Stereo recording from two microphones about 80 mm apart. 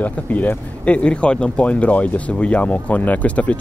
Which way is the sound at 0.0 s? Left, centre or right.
Centre.